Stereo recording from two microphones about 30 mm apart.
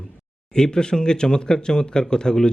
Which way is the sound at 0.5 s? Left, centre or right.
Left.